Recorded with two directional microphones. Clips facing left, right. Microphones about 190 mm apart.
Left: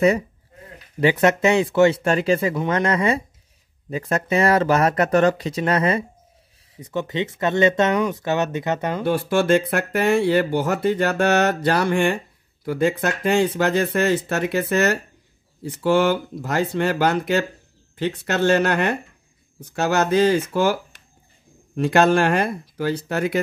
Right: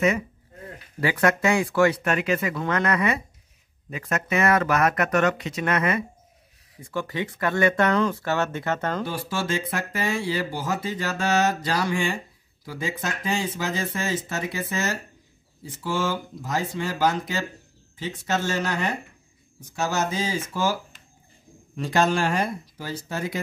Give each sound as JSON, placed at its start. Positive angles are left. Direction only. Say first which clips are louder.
{"t": 1.0, "sound": "speech", "louder": "left 5 dB", "side_deg": 25}
{"t": 9.0, "sound": "speech", "louder": "left 9 dB", "side_deg": 60}
{"t": 21.7, "sound": "speech", "louder": "left 6 dB", "side_deg": 60}